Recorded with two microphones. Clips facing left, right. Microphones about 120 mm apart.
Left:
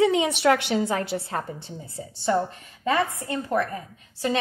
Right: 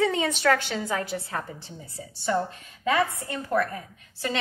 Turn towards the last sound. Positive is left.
turn(degrees=20)  # may be behind; listen again after turning